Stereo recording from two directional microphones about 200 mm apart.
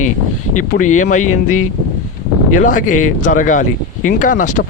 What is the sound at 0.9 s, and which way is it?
Speech, 40° left (ahead or behind).